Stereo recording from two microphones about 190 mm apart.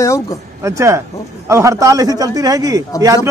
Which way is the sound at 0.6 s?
15° right (ahead or behind).